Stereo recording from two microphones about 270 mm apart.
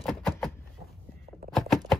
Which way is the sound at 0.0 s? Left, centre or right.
Centre.